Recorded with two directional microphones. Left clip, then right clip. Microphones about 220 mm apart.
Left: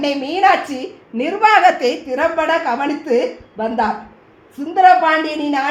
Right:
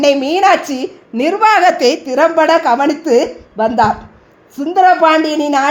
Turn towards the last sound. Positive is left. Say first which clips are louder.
# right 6 dB
turn(degrees=-45)  # may be behind; listen again after turning